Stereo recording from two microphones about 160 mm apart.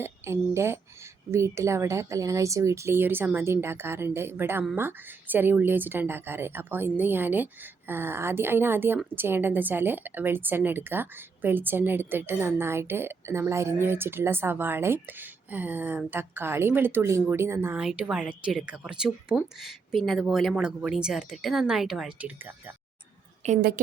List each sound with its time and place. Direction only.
0.0 s a woman's voice: 15° right (ahead or behind)
23.6 s a woman's voice: 70° right (ahead or behind)